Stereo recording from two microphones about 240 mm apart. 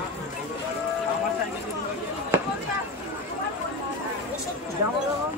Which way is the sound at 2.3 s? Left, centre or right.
Centre.